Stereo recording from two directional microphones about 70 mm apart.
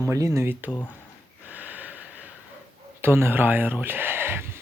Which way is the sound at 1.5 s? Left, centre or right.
Right.